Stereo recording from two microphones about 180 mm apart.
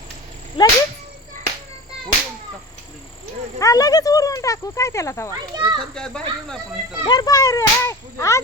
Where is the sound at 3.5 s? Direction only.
20° left (ahead or behind).